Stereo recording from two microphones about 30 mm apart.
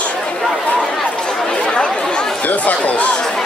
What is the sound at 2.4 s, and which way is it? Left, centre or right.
Speech, left.